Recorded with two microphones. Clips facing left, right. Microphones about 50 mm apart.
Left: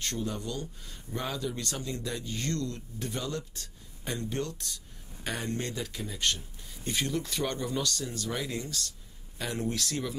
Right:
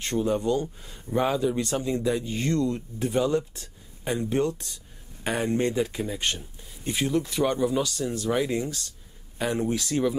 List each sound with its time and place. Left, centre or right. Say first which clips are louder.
0.0 s speech: right 9 dB; right
6.8 s speech: right 6 dB; centre